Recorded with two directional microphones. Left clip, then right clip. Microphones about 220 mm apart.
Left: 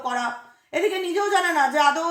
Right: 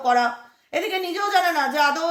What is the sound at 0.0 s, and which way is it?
A woman's voice, 50° right (ahead or behind).